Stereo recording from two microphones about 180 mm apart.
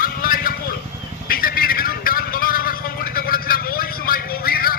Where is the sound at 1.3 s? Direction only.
55° left (ahead or behind).